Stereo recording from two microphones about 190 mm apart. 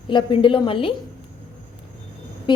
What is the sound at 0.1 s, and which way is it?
Speech, 25° left (ahead or behind).